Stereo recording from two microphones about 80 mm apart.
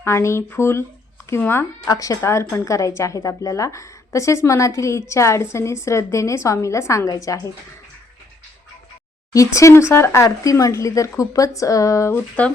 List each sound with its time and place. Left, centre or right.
0.0 s a woman's voice: left
1.9 s a woman's voice: left
9.3 s a woman's voice: left
12.4 s speech: centre